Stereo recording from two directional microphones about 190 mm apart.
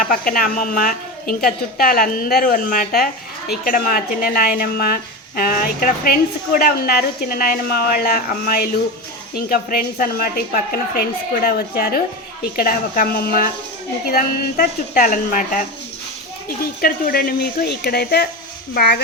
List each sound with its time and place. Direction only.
0.1 s a woman's voice: 50° left (ahead or behind)
16.8 s a woman's voice: 50° left (ahead or behind)